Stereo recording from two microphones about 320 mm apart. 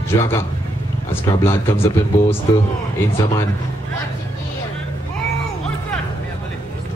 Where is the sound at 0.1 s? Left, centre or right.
Centre.